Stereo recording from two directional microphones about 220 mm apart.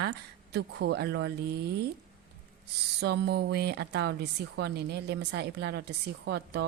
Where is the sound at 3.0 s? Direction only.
45° right (ahead or behind).